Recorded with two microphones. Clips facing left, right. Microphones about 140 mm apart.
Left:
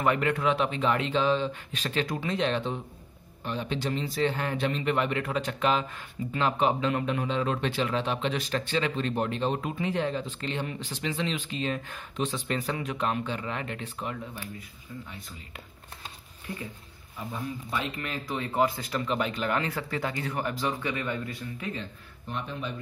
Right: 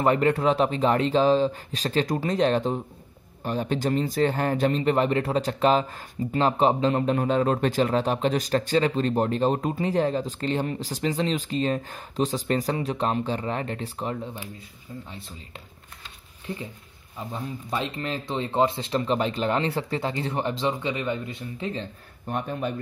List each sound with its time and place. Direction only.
0.0 s speech: 35° right (ahead or behind)
17.3 s speech: 30° right (ahead or behind)
22.3 s speech: 50° right (ahead or behind)